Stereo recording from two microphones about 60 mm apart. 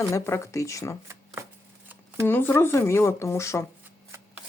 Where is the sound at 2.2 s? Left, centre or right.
Left.